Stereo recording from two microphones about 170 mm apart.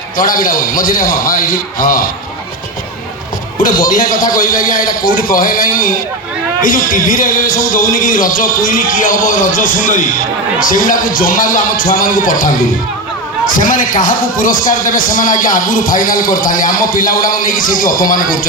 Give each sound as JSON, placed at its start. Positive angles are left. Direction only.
{"t": 0.2, "sound": "a man's voice", "side_deg": 55}
{"t": 3.6, "sound": "a man's voice", "side_deg": 55}